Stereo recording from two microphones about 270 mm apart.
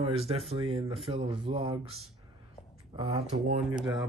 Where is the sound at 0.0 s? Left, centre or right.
Right.